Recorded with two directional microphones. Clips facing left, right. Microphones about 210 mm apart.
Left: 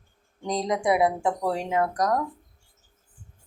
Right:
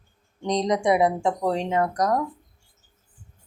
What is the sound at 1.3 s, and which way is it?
Speech, 20° right (ahead or behind).